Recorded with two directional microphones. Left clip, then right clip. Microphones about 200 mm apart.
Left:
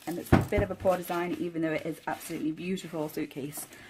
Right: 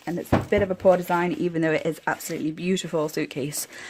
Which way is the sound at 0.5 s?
50° right (ahead or behind).